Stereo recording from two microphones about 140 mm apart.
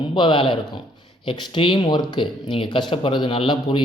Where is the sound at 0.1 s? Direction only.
35° left (ahead or behind).